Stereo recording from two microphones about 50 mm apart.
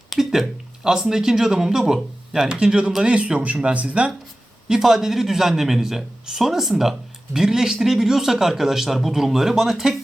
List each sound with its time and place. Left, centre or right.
0.1 s a sound: centre
0.9 s a man's voice: centre; by 4.1 s right
4.7 s a man's voice: centre